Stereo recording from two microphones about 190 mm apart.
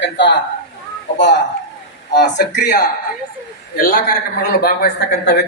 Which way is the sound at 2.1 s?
60° left (ahead or behind).